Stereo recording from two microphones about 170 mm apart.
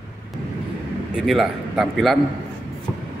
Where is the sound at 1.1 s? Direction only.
Centre (ahead or behind).